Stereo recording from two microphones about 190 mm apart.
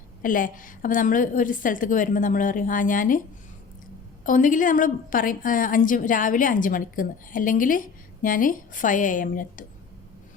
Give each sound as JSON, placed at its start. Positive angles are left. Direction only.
{"t": 0.2, "sound": "a woman's voice", "side_deg": 45}
{"t": 4.2, "sound": "a woman's voice", "side_deg": 45}